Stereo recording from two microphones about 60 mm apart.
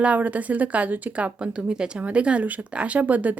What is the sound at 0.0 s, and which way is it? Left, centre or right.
Speech, right.